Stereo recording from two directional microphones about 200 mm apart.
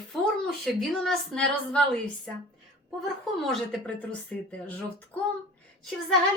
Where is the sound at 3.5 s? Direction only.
Centre (ahead or behind).